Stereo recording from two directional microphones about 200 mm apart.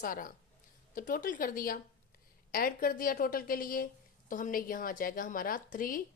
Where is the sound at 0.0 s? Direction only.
45° left (ahead or behind).